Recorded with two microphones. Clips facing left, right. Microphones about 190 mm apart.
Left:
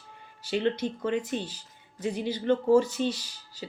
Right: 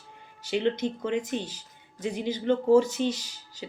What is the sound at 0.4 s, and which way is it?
Speech, 15° right (ahead or behind).